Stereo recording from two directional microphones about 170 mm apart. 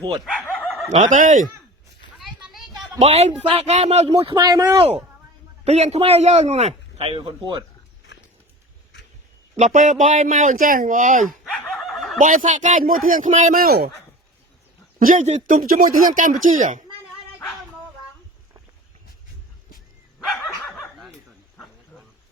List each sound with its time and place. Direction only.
0.3 s dog: 5° left (ahead or behind)
0.9 s speech: 45° right (ahead or behind)
2.1 s a sound: centre (ahead or behind)
3.0 s a man's voice: 40° right (ahead or behind); by 4.9 s 20° right (ahead or behind)
5.6 s a man's voice: 40° right (ahead or behind)
9.6 s speech: 45° right (ahead or behind)
11.4 s snicker: centre (ahead or behind)
12.2 s speech: 50° right (ahead or behind)
13.6 s speech: 65° right (ahead or behind)
14.9 s speech: 50° right (ahead or behind)
20.1 s dog: centre (ahead or behind)
20.7 s snicker: 5° left (ahead or behind)